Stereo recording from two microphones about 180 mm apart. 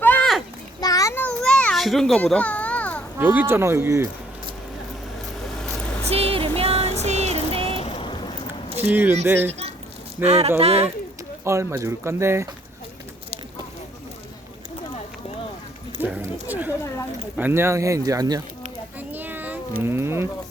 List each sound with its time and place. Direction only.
0.0 s children playing: 10° left (ahead or behind)
3.2 s speech: 10° right (ahead or behind)
6.1 s a sound: 35° right (ahead or behind)
7.8 s boat: 30° left (ahead or behind)
8.9 s speech: 10° right (ahead or behind)
9.5 s a sound: 35° right (ahead or behind)
10.2 s speech: 35° right (ahead or behind)
11.4 s speech: 15° right (ahead or behind)
16.0 s a sound: 10° right (ahead or behind)
17.3 s speech: 10° right (ahead or behind)
18.9 s a sound: 10° right (ahead or behind)
19.8 s speech: 15° right (ahead or behind)